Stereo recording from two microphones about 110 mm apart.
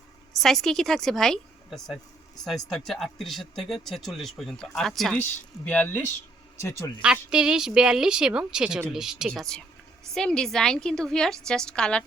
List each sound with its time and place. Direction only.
0.3 s speech: centre (ahead or behind)
5.6 s speech: 15° left (ahead or behind)
6.6 s speech: 30° left (ahead or behind)
7.0 s a woman's voice: 10° right (ahead or behind); by 12.0 s 10° left (ahead or behind)